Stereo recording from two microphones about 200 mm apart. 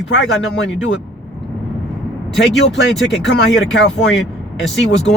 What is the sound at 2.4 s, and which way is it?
Speech, 60° left (ahead or behind).